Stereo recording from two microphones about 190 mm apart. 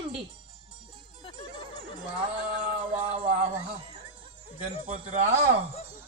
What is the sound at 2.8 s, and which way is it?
Music, 30° right (ahead or behind).